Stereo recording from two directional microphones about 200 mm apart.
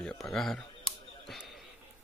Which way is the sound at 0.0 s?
5° left (ahead or behind).